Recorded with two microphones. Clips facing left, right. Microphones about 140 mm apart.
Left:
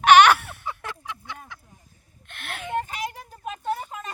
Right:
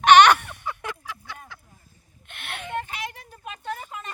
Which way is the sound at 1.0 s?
20° left (ahead or behind).